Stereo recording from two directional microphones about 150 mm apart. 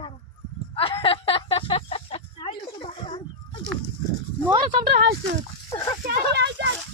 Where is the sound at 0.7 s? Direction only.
35° left (ahead or behind).